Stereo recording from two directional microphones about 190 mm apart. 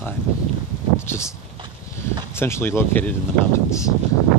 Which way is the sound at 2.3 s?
10° left (ahead or behind).